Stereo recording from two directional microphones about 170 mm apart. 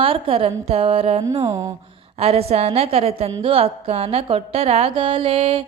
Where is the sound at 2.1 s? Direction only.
35° right (ahead or behind).